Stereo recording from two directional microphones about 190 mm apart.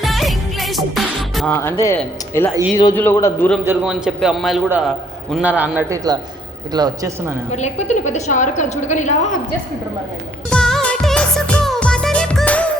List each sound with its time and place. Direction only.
0.0 s music: centre (ahead or behind)
2.0 s a man's voice: 10° left (ahead or behind)
3.6 s a man's voice: 10° right (ahead or behind)
6.7 s a man's voice: 20° right (ahead or behind)
7.5 s a woman's voice: 35° left (ahead or behind)
10.5 s music: 5° left (ahead or behind)